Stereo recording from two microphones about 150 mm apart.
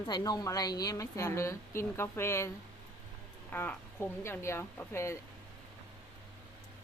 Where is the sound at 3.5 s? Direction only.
15° left (ahead or behind).